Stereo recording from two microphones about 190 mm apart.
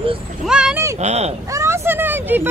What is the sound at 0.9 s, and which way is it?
Speech, 35° right (ahead or behind).